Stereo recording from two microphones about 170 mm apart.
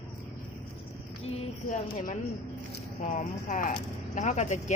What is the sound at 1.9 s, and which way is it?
Speech, 55° left (ahead or behind).